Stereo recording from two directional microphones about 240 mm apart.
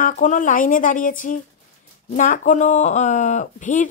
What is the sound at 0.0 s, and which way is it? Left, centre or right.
Speech, left.